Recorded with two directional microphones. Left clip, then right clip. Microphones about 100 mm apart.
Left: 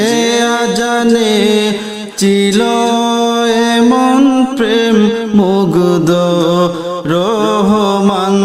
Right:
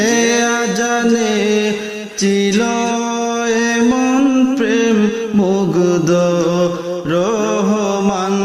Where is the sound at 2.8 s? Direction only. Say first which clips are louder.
Left 6 dB; 45° left (ahead or behind).